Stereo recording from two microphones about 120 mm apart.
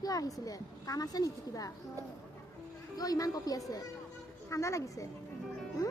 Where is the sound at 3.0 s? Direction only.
30° left (ahead or behind).